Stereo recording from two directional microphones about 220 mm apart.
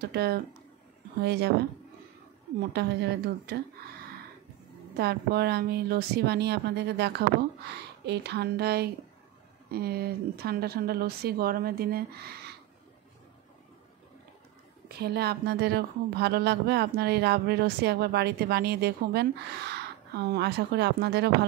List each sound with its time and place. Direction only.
0.0 s speech: 45° right (ahead or behind)
2.7 s speech: 50° right (ahead or behind)
4.9 s speech: 45° right (ahead or behind)
14.9 s speech: 45° right (ahead or behind)